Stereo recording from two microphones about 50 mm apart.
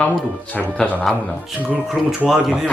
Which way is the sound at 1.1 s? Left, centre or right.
Centre.